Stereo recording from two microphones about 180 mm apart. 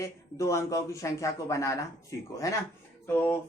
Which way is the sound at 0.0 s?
15° left (ahead or behind).